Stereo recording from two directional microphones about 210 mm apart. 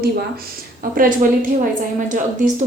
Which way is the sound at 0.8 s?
40° right (ahead or behind).